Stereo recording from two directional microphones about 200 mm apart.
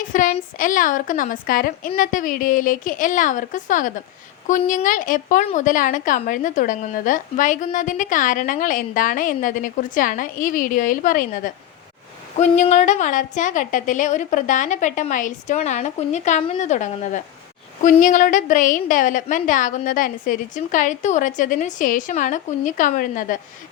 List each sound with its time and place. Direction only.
0.1 s a woman's voice: 40° left (ahead or behind)